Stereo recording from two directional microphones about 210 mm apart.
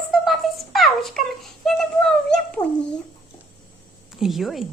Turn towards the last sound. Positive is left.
turn(degrees=0)  # may be behind; listen again after turning